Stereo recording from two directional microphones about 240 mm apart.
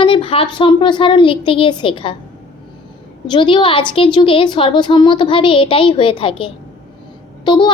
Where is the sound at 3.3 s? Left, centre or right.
Centre.